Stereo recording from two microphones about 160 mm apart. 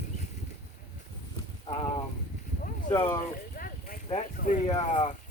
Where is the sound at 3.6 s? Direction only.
65° left (ahead or behind).